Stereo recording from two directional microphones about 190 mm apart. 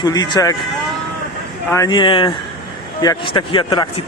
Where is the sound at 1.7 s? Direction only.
20° left (ahead or behind).